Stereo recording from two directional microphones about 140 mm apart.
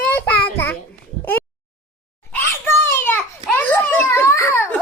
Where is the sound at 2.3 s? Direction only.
15° left (ahead or behind).